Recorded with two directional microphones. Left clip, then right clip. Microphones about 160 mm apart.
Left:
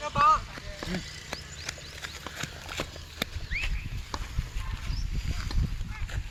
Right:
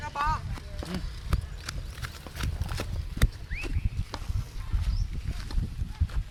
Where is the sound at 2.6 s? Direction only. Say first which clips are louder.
Left 3 dB; 10° right (ahead or behind).